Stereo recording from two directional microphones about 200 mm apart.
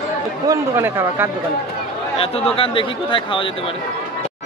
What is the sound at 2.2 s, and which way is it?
Speech, 25° left (ahead or behind).